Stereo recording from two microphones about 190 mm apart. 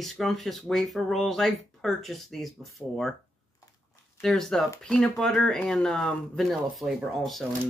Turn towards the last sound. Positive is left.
turn(degrees=0)  # may be behind; listen again after turning